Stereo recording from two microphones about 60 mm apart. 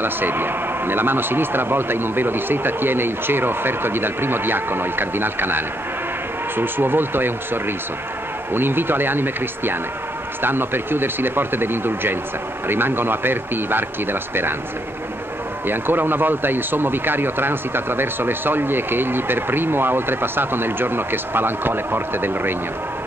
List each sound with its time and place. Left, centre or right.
0.0 s speech: right
15.6 s speech: right